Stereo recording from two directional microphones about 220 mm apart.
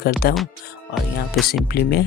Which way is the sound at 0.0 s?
45° left (ahead or behind).